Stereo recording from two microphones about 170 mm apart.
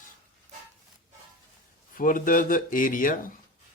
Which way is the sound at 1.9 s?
55° left (ahead or behind).